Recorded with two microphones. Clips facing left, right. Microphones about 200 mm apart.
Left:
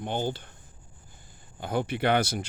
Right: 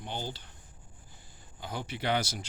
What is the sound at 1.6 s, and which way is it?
Speech, 55° left (ahead or behind).